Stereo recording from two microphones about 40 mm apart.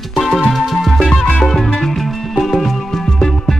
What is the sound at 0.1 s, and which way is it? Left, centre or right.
Music, centre.